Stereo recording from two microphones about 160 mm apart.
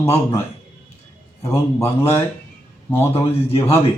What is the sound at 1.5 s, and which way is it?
Speech, 15° left (ahead or behind).